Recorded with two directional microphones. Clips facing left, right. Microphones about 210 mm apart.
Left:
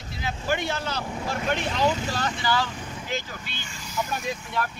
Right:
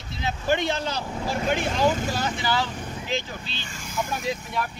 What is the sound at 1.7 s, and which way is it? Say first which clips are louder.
Speech: right 1 dB; 45° right (ahead or behind).